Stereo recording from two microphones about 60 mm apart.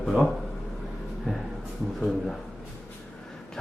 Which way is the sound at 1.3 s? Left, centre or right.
Centre.